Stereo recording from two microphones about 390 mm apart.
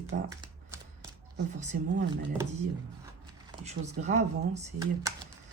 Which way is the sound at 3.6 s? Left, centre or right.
Centre.